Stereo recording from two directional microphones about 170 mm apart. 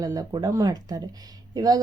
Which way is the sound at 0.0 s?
20° right (ahead or behind).